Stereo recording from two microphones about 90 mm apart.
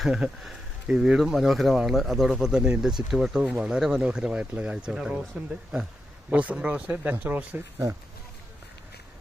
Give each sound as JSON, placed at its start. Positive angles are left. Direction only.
{"t": 0.0, "sound": "speech", "side_deg": -5}
{"t": 6.3, "sound": "speech", "side_deg": -15}